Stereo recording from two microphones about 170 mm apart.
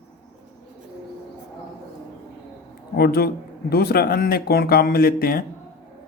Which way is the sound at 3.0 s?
70° left (ahead or behind).